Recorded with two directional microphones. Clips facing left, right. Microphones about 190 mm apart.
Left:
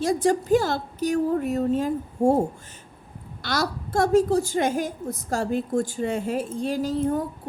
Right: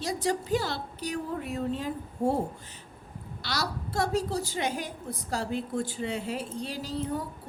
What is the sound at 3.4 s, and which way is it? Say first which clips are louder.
A woman's voice: left 6 dB; 50° left (ahead or behind).